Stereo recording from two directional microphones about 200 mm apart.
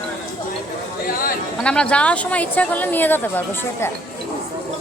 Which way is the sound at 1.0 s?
45° left (ahead or behind).